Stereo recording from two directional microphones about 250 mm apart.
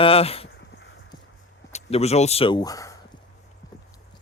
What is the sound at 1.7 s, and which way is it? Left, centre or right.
Speech, left.